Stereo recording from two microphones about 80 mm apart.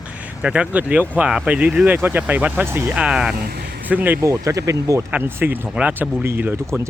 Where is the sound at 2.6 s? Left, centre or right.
Right.